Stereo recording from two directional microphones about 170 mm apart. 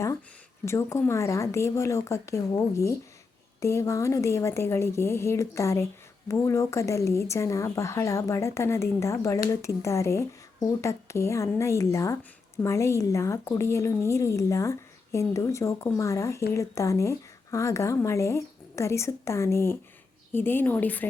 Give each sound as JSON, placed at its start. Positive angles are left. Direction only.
{"t": 0.6, "sound": "a woman's voice", "side_deg": 15}